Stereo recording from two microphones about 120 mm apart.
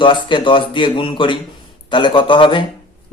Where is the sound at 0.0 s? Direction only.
40° left (ahead or behind).